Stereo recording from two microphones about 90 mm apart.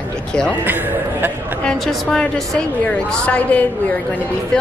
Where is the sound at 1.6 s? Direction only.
5° left (ahead or behind).